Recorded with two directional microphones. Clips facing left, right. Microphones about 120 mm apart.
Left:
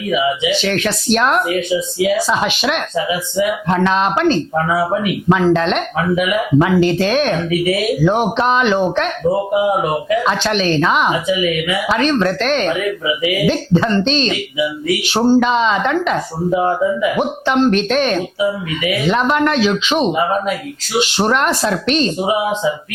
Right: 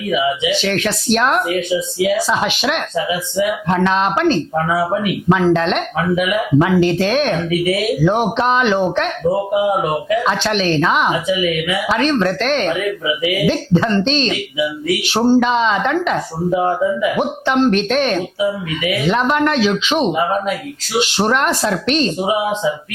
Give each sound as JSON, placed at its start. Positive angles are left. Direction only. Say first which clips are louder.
{"t": 0.1, "sound": "speech", "louder": "left 1 dB", "side_deg": 20}
{"t": 9.2, "sound": "speech", "louder": "left 1 dB", "side_deg": 30}
{"t": 9.6, "sound": "speech", "louder": "left 1 dB", "side_deg": 20}
{"t": 15.2, "sound": "speech", "louder": "even", "side_deg": 35}
{"t": 15.4, "sound": "speech", "louder": "left 1 dB", "side_deg": 20}